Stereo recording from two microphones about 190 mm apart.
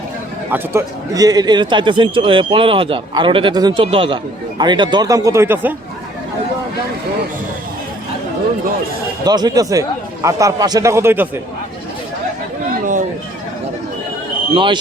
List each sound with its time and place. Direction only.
0.5 s a man's voice: 15° right (ahead or behind)
9.2 s a man's voice: 20° right (ahead or behind)
12.8 s chatter: 40° right (ahead or behind)
14.5 s a man's voice: 25° right (ahead or behind)